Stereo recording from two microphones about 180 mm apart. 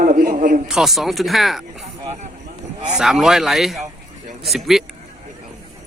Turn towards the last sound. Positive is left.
turn(degrees=0)  # may be behind; listen again after turning